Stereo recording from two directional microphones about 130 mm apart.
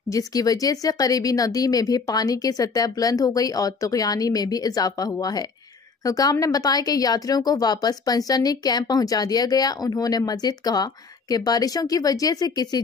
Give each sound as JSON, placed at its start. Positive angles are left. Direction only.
{"t": 0.1, "sound": "speech", "side_deg": 25}